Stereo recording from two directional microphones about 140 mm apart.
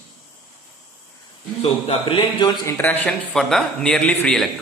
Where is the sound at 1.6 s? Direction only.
40° left (ahead or behind).